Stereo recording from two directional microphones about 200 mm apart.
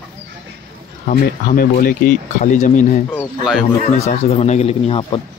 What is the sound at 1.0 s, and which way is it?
A man's voice, 45° left (ahead or behind).